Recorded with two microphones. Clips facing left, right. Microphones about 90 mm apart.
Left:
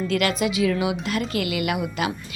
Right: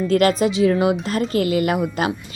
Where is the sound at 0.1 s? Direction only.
40° right (ahead or behind).